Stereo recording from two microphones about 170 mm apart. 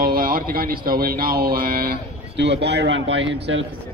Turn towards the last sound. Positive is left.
turn(degrees=-90)